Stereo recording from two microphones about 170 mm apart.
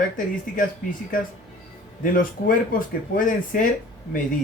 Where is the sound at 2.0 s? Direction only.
55° left (ahead or behind).